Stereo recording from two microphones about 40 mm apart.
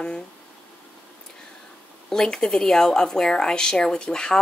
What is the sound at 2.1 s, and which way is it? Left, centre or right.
Speech, centre.